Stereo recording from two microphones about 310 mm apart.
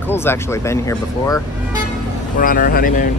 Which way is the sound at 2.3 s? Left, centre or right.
Left.